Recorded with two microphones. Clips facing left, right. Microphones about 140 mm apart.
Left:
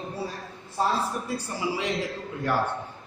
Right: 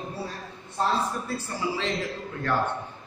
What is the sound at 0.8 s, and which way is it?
Speech, 10° left (ahead or behind).